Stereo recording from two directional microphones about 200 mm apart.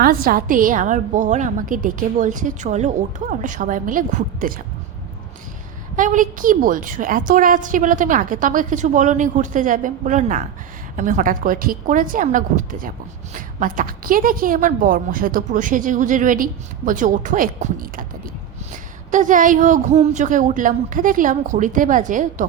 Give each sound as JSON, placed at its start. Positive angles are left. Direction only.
{"t": 0.0, "sound": "a woman's voice", "side_deg": -45}
{"t": 6.0, "sound": "a woman's voice", "side_deg": -40}
{"t": 19.1, "sound": "a woman's voice", "side_deg": -40}